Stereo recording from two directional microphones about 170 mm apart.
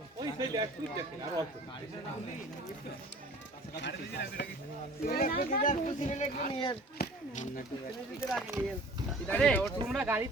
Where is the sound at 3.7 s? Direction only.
85° left; by 6.3 s 45° left (ahead or behind).